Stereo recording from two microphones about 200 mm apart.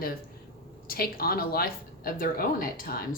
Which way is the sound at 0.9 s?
50° left (ahead or behind).